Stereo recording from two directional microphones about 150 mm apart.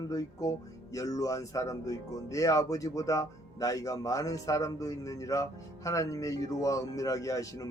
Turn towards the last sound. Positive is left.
turn(degrees=20)  # may be behind; listen again after turning